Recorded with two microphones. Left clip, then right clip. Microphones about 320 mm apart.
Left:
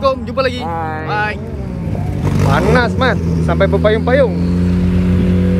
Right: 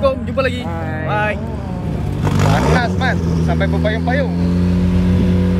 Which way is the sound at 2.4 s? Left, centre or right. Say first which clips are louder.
Left 3 dB; centre.